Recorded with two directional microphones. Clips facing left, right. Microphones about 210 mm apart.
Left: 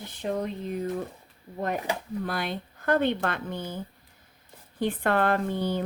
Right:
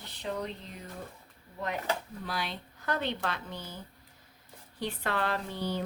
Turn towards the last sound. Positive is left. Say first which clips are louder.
# left 7 dB
turn(degrees=55)  # may be behind; listen again after turning